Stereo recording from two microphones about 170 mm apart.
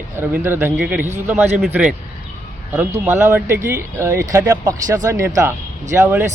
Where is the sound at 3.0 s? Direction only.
15° right (ahead or behind).